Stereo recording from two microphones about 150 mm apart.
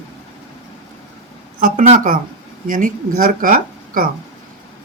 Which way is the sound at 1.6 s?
60° right (ahead or behind).